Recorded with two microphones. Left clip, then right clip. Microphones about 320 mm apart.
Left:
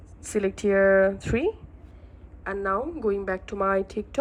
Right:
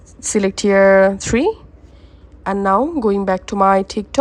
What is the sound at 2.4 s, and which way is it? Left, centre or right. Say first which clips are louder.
A woman's voice: right 11 dB; centre.